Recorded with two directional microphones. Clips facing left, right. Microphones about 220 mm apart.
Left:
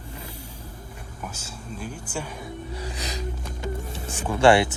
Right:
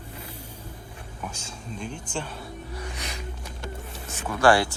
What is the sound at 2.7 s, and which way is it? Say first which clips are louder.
Music: left 3 dB; 30° left (ahead or behind).